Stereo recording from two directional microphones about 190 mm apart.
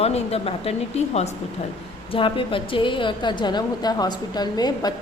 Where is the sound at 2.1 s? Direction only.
25° left (ahead or behind).